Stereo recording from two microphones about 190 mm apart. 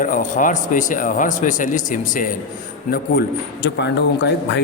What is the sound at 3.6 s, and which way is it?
Speech, 65° left (ahead or behind).